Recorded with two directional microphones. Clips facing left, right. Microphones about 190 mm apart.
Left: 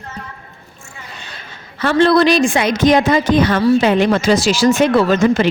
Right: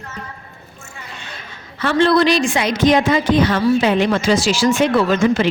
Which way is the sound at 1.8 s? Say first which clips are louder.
Left 2 dB; 40° left (ahead or behind).